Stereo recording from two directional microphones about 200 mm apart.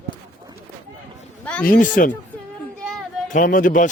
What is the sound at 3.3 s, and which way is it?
Speech, 40° left (ahead or behind).